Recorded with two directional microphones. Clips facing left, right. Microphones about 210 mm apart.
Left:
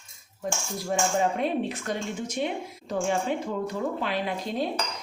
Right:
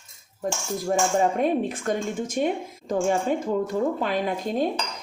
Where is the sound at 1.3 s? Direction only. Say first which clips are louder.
Right 4 dB; 45° right (ahead or behind).